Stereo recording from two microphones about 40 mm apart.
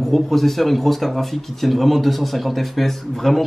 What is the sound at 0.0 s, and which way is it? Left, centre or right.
Speech, centre.